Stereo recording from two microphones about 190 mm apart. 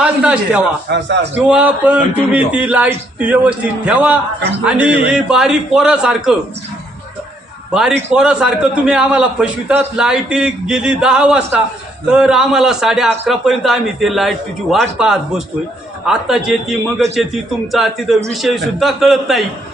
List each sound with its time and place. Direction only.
0.0 s a sound: 5° right (ahead or behind)
0.9 s a man's voice: 65° right (ahead or behind)
1.5 s a man's voice: 5° right (ahead or behind)
7.7 s a man's voice: 5° right (ahead or behind)